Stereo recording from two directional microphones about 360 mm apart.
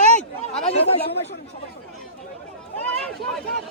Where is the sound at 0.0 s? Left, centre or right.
Centre.